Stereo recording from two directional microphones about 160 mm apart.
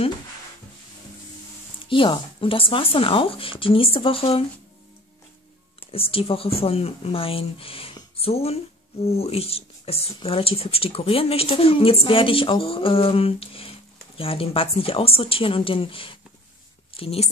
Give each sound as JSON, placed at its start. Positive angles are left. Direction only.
{"t": 1.9, "sound": "speech", "side_deg": 30}
{"t": 5.9, "sound": "a woman's voice", "side_deg": 35}